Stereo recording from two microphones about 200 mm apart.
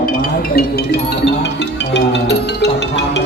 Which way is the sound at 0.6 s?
55° left (ahead or behind).